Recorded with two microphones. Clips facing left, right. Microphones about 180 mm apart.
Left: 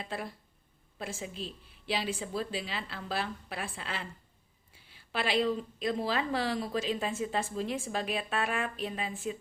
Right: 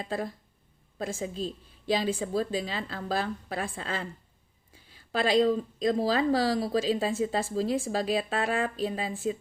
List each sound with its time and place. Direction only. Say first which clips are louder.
0.0 s speech: right 6 dB; 40° right (ahead or behind)